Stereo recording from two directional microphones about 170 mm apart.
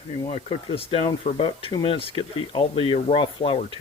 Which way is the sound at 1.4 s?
30° left (ahead or behind).